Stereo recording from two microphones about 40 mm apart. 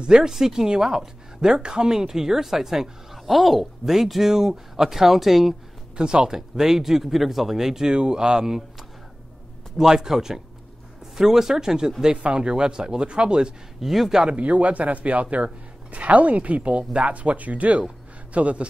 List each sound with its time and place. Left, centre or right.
0.0 s speech: centre
5.9 s speech: right
9.8 s speech: centre
13.7 s a man's voice: centre
14.3 s speech: right